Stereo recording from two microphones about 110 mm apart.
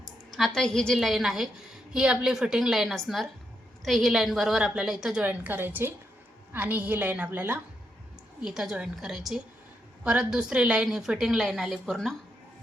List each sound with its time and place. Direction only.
0.3 s a woman's voice: centre (ahead or behind); by 7.6 s 15° right (ahead or behind)
8.4 s a woman's voice: 5° right (ahead or behind)